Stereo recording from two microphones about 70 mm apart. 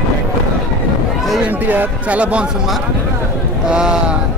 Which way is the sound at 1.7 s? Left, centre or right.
Right.